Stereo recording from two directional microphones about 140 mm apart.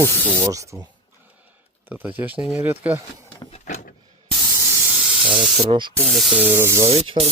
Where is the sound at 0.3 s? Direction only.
20° right (ahead or behind).